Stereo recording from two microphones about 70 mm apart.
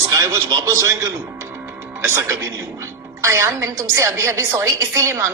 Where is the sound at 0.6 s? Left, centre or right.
Right.